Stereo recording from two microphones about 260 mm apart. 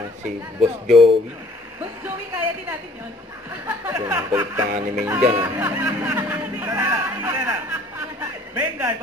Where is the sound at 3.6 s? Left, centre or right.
Centre.